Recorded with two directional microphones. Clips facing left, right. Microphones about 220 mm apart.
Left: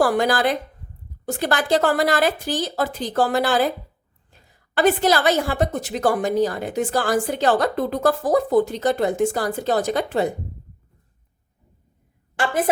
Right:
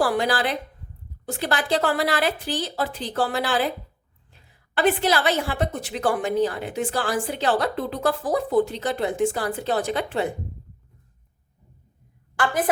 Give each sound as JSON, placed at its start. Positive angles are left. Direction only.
{"t": 0.0, "sound": "a woman's voice", "side_deg": 45}
{"t": 12.4, "sound": "a woman's voice", "side_deg": 25}